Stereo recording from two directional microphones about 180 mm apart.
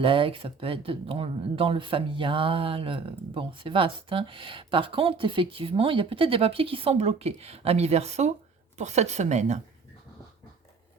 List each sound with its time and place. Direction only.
0.0 s speech: 30° right (ahead or behind)